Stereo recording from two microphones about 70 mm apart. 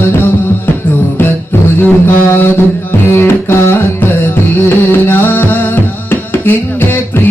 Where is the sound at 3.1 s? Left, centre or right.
Left.